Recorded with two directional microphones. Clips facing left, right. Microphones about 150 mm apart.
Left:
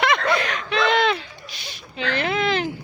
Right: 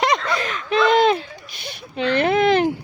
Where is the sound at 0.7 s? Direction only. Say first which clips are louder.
Right 5 dB; 45° right (ahead or behind).